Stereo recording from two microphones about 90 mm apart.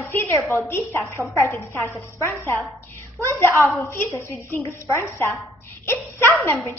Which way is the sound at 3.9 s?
30° left (ahead or behind).